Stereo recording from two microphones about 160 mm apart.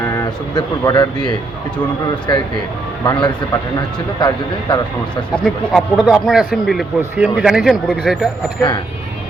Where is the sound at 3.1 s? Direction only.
30° left (ahead or behind).